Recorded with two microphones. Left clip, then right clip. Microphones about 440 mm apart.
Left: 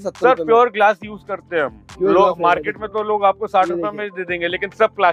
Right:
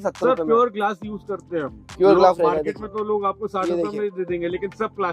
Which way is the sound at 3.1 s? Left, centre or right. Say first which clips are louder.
Left 12 dB; left.